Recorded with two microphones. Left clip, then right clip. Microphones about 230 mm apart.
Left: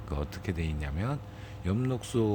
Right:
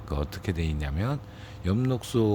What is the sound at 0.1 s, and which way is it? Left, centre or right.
Speech, centre.